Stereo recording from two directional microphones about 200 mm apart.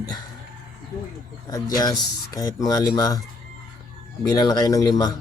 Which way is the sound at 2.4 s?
20° left (ahead or behind).